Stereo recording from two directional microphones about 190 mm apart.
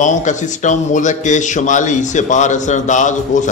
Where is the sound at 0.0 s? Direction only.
40° left (ahead or behind).